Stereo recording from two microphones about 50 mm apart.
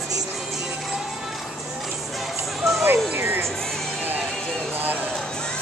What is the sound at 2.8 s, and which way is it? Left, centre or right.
Music, right.